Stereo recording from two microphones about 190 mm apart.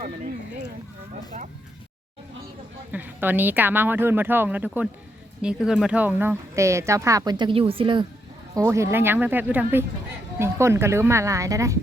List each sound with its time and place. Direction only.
2.9 s speech: 10° right (ahead or behind); by 8.0 s 25° right (ahead or behind)
8.5 s speech: 15° right (ahead or behind)